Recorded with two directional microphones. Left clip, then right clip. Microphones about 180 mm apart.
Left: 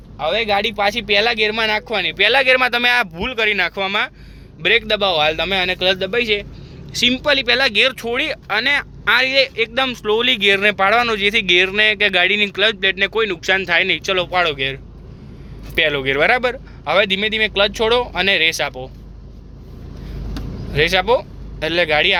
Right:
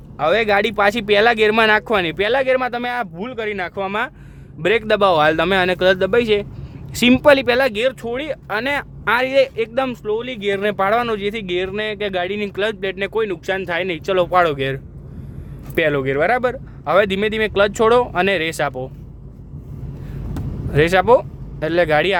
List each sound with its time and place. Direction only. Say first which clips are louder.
0.2 s speech: right 2 dB; 50° right (ahead or behind); by 4.1 s 25° right (ahead or behind)
4.7 s speech: right 1 dB; 40° right (ahead or behind); by 10.0 s 25° right (ahead or behind)
10.0 s speech: left 7 dB; 5° right (ahead or behind)
10.5 s speech: right 1 dB; 25° right (ahead or behind)
20.7 s speech: right 2 dB; 35° right (ahead or behind)